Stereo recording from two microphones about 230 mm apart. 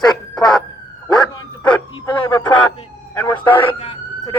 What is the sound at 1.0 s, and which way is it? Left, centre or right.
Police car, centre.